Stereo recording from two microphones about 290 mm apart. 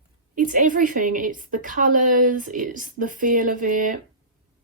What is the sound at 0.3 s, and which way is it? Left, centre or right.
Speech, right.